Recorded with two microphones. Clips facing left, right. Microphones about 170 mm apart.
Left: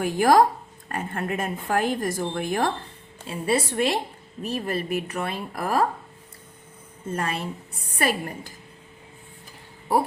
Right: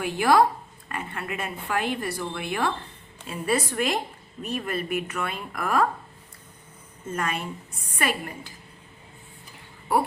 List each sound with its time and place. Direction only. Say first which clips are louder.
0.0 s a woman's voice: left 2 dB; 45° left (ahead or behind)
3.2 s a woman's voice: left 2 dB; 30° left (ahead or behind)
7.1 s a woman's voice: left 1 dB; 30° left (ahead or behind)